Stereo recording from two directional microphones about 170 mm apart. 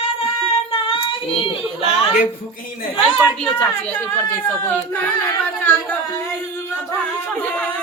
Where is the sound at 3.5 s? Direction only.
10° left (ahead or behind).